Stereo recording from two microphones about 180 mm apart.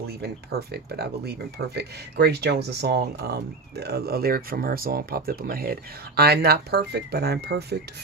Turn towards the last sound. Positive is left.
turn(degrees=-65)  # may be behind; listen again after turning